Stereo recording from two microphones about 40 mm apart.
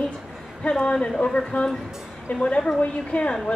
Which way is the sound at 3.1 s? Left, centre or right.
Left.